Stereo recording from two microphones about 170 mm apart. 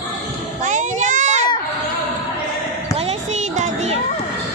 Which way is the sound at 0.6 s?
45° right (ahead or behind).